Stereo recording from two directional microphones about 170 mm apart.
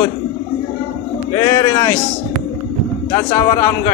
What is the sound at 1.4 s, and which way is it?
Speech, 15° left (ahead or behind).